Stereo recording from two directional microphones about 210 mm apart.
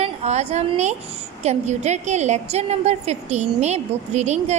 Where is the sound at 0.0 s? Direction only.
30° right (ahead or behind).